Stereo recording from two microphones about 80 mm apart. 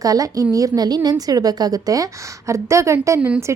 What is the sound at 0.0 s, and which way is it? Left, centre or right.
A woman's voice, right.